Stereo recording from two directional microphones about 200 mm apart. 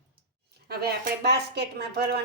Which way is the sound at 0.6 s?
55° right (ahead or behind).